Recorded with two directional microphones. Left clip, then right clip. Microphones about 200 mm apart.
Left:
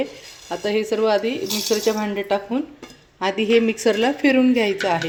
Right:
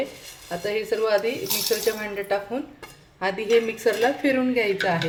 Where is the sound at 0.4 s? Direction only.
35° left (ahead or behind).